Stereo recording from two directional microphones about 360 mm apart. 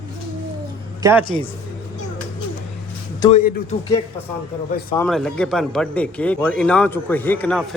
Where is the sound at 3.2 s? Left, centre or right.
Centre.